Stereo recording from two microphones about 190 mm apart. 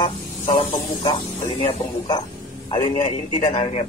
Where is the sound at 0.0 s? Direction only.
30° left (ahead or behind).